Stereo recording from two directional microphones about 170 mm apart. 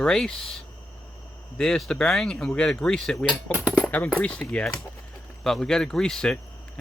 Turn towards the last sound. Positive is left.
turn(degrees=5)  # may be behind; listen again after turning